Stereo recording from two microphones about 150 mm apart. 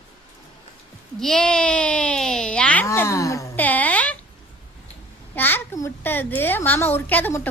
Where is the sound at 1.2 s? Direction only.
5° left (ahead or behind).